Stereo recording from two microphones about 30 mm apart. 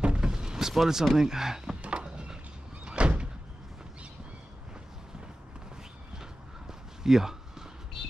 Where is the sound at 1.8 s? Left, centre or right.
Right.